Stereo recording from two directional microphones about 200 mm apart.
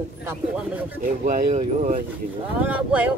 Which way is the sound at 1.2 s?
40° right (ahead or behind).